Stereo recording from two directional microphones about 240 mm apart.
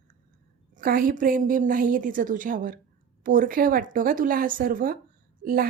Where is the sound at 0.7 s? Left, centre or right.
Right.